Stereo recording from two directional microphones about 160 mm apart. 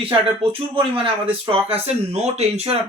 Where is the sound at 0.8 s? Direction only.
35° right (ahead or behind).